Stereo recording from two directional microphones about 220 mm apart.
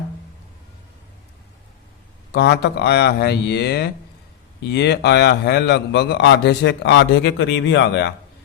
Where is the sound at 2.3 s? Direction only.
50° left (ahead or behind).